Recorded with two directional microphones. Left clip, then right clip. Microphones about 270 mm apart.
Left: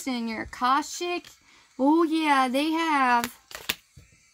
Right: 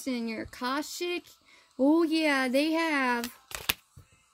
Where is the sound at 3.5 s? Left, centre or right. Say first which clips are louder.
Right 2 dB; right.